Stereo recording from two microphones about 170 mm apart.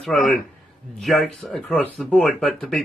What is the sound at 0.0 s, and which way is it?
Speech, 5° left (ahead or behind).